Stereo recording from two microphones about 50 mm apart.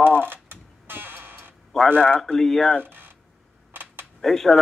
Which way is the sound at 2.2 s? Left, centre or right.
Centre.